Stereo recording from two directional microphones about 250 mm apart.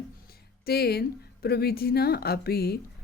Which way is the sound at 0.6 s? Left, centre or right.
Left.